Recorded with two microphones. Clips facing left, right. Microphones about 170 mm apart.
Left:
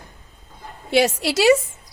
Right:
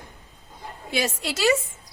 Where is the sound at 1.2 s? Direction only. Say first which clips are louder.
Left 7 dB; 80° left.